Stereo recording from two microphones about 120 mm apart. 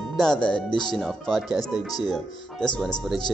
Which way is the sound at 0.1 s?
5° left (ahead or behind).